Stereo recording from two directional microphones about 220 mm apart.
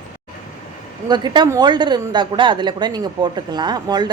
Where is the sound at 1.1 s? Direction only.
20° right (ahead or behind).